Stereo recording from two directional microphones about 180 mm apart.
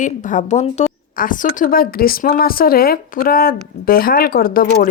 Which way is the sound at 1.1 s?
50° left (ahead or behind).